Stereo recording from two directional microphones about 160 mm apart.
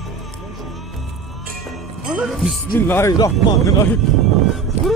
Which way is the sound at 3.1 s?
25° left (ahead or behind).